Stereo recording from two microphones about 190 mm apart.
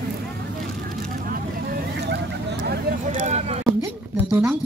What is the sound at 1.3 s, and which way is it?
Vehicle, 50° right (ahead or behind).